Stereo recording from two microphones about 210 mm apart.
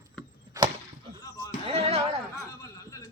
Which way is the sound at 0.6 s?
15° right (ahead or behind).